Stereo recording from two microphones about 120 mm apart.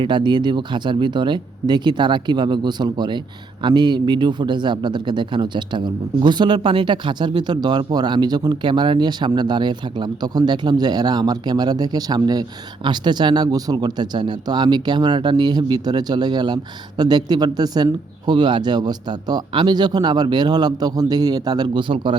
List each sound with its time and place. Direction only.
0.0 s speech: 40° right (ahead or behind)